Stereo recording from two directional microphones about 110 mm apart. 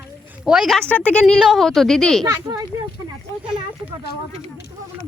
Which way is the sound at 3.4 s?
10° right (ahead or behind).